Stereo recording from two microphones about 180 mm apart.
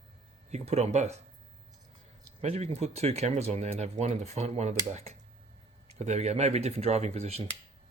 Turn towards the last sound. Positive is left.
turn(degrees=-35)  # may be behind; listen again after turning